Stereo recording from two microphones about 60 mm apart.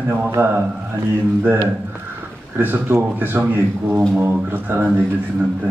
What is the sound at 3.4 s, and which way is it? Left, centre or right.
Speech, right.